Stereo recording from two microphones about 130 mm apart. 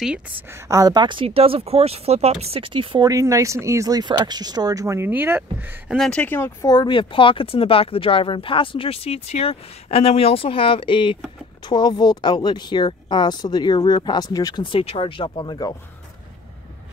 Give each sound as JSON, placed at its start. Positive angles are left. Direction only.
{"t": 0.5, "sound": "speech", "side_deg": -25}
{"t": 3.1, "sound": "speech", "side_deg": -25}
{"t": 5.9, "sound": "speech", "side_deg": 5}
{"t": 6.6, "sound": "speech", "side_deg": 30}